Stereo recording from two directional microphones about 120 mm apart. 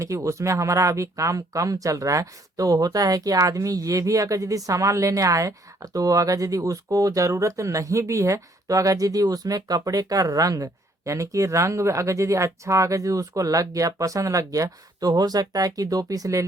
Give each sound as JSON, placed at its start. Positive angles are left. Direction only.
{"t": 0.0, "sound": "speech", "side_deg": -25}